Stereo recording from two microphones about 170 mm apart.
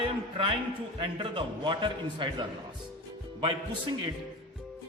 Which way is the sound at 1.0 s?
30° right (ahead or behind).